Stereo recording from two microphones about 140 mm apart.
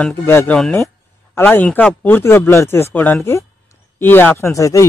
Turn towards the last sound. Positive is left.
turn(degrees=20)  # may be behind; listen again after turning